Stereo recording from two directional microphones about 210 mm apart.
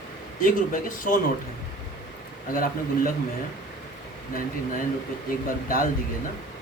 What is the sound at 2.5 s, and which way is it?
Speech, 40° left (ahead or behind).